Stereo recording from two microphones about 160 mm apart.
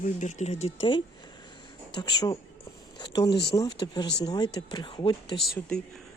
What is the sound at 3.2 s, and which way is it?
Speech, 90° left.